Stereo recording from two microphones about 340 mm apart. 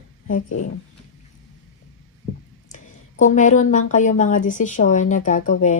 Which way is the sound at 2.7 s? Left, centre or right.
Left.